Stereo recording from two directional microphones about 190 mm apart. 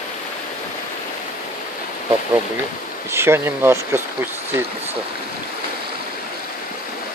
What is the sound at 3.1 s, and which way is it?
Speech, 15° right (ahead or behind).